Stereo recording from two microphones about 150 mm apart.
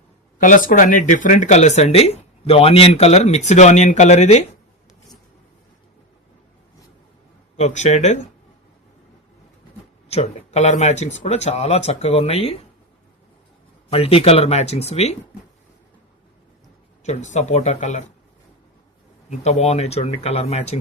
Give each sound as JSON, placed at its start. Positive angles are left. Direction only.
{"t": 0.3, "sound": "speech", "side_deg": 60}
{"t": 7.5, "sound": "speech", "side_deg": 50}
{"t": 10.1, "sound": "speech", "side_deg": 45}
{"t": 13.9, "sound": "speech", "side_deg": 40}
{"t": 17.0, "sound": "speech", "side_deg": 50}
{"t": 19.3, "sound": "speech", "side_deg": 50}